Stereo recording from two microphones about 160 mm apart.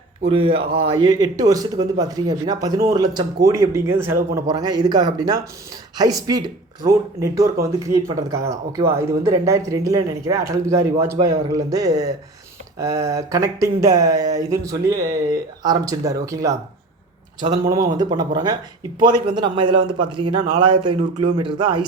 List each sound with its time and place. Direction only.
0.2 s a man's voice: 35° right (ahead or behind)